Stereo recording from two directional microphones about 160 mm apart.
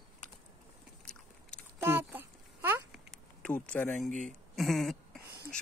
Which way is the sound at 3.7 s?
10° left (ahead or behind).